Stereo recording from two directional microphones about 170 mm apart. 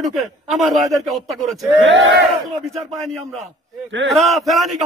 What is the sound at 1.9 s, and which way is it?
Battle cry, 90° right.